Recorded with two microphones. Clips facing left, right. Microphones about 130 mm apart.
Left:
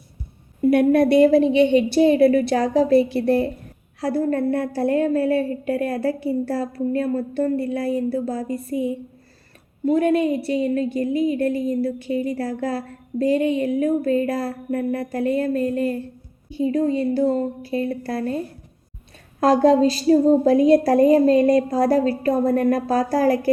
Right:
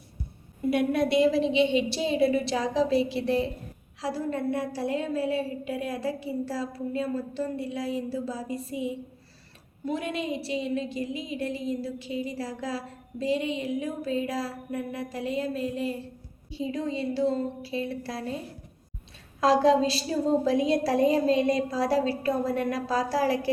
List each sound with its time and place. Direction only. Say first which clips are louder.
0.6 s a woman's voice: left 9 dB; 55° left (ahead or behind)
19.4 s a woman's voice: left 6 dB; 50° left (ahead or behind)